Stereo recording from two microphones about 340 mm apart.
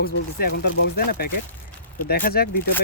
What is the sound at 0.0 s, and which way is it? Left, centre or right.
Speech, left.